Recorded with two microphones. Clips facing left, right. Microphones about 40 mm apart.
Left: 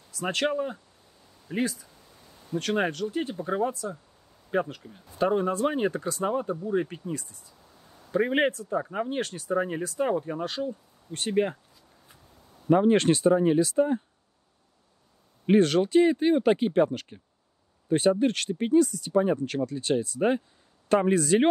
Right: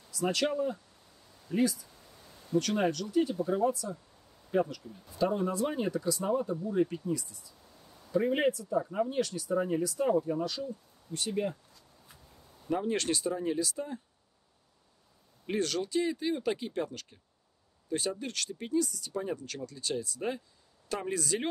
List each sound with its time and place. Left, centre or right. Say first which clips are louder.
0.1 s speech: left 3 dB; left
2.0 s a sound: left 1 dB; centre
2.6 s speech: left 3 dB; left
7.6 s a sound: left 2 dB; centre
8.1 s speech: left 3 dB; left
12.6 s speech: left 10 dB; left
15.4 s speech: left 11 dB; left